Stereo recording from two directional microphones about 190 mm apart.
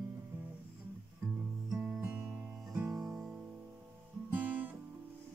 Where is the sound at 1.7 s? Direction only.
Centre (ahead or behind).